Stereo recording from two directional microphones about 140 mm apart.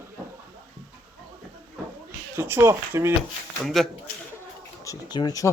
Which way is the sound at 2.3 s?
15° right (ahead or behind).